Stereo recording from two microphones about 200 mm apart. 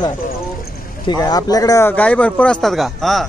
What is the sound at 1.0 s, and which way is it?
Speech, 20° left (ahead or behind).